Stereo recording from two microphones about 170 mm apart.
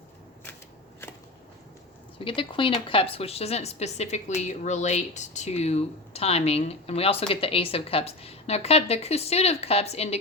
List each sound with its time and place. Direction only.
2.1 s speech: 30° left (ahead or behind)